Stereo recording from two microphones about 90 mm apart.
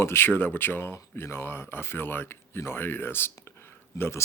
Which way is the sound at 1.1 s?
25° left (ahead or behind).